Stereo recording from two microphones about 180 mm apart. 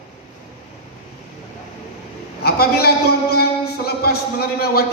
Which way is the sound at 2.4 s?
60° left (ahead or behind).